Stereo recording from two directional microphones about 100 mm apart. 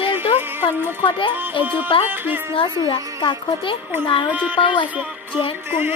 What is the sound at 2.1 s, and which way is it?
Speech, 20° right (ahead or behind).